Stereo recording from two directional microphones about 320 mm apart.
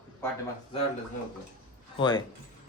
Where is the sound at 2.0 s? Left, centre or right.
Centre.